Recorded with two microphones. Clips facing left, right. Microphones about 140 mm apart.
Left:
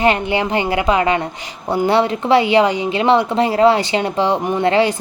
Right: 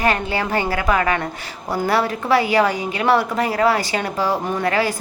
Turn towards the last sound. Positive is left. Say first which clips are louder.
# left 5 dB
turn(degrees=25)  # may be behind; listen again after turning